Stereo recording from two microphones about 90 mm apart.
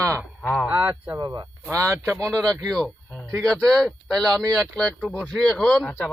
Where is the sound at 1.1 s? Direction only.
40° right (ahead or behind).